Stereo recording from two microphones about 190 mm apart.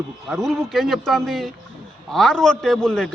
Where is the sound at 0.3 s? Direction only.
Centre (ahead or behind).